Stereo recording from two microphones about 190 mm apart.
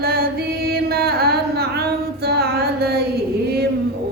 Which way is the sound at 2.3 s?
55° right (ahead or behind).